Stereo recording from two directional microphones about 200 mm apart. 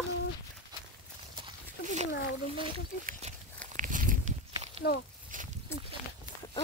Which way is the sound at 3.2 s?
35° right (ahead or behind).